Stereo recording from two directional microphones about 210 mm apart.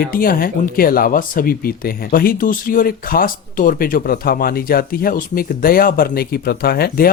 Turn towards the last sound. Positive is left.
turn(degrees=45)  # may be behind; listen again after turning